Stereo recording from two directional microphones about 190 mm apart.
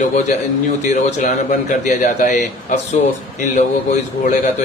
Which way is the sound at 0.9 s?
40° left (ahead or behind).